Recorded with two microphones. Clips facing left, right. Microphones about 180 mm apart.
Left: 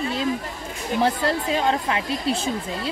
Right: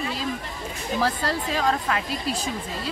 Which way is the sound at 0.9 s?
25° left (ahead or behind).